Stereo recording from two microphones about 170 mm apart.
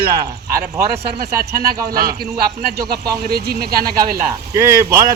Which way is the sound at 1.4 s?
60° right (ahead or behind).